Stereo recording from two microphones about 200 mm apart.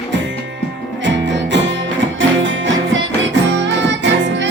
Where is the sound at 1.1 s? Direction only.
65° right (ahead or behind).